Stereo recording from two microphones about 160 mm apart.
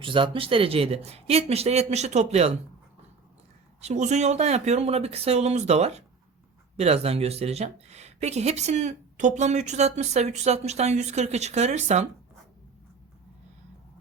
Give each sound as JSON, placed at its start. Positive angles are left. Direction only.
{"t": 0.0, "sound": "speech", "side_deg": -30}
{"t": 3.8, "sound": "speech", "side_deg": -45}